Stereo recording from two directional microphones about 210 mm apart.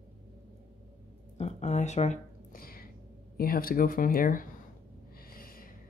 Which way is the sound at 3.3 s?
45° left (ahead or behind).